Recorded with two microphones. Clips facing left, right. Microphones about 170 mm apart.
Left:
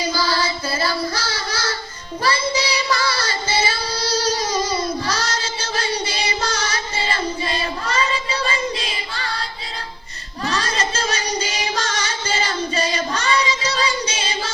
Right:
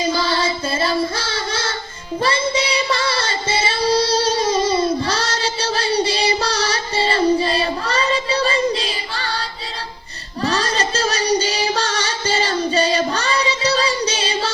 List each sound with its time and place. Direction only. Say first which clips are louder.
0.0 s child singing: right 2 dB; 25° right (ahead or behind)
10.4 s music: right 3 dB; 35° right (ahead or behind)